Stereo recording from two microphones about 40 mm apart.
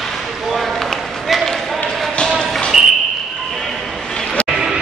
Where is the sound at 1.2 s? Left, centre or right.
Centre.